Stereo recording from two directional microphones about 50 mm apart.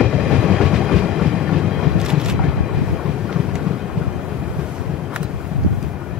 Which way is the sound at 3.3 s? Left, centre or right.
Centre.